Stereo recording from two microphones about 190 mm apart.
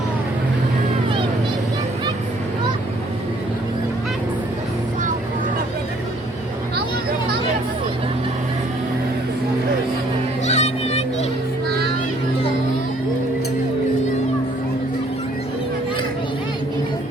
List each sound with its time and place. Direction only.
10.4 s children playing: 35° left (ahead or behind)